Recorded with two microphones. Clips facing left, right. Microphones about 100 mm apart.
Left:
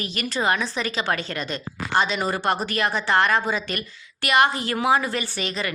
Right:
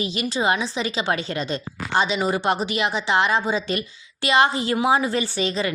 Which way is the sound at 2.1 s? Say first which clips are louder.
Right 2 dB; 15° right (ahead or behind).